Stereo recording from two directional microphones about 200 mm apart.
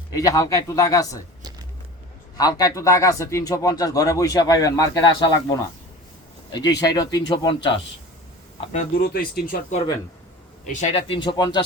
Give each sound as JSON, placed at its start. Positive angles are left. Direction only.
{"t": 0.1, "sound": "speech", "side_deg": 15}
{"t": 2.4, "sound": "speech", "side_deg": 20}
{"t": 6.5, "sound": "speech", "side_deg": 20}
{"t": 9.0, "sound": "speech", "side_deg": 50}
{"t": 10.8, "sound": "speech", "side_deg": 35}